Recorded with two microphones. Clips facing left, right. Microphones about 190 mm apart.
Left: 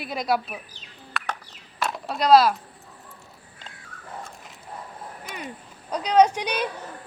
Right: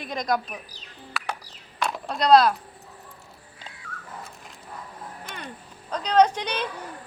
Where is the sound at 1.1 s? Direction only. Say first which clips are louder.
Even; 10° right (ahead or behind).